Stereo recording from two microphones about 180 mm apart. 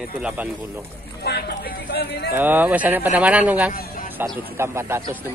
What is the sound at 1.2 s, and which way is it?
Speech, 60° left (ahead or behind).